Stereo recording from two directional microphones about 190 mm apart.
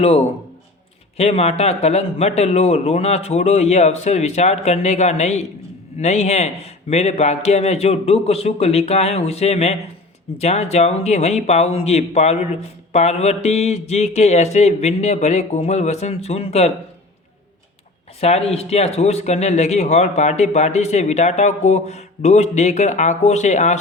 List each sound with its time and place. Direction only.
1.1 s speech: 35° left (ahead or behind)
18.2 s speech: 35° left (ahead or behind)